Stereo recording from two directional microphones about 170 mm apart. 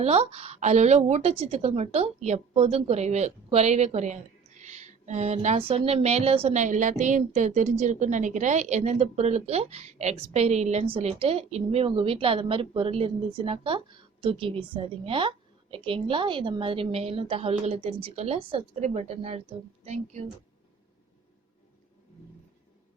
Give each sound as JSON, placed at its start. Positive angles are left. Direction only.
{"t": 0.0, "sound": "a woman's voice", "side_deg": -35}